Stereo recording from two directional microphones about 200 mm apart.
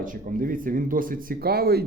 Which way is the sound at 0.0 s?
45° right (ahead or behind).